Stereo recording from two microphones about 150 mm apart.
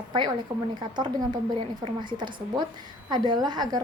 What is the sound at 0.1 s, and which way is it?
A woman's voice, 30° right (ahead or behind).